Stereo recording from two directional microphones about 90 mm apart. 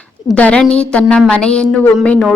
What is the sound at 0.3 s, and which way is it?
A woman's voice, 15° left (ahead or behind).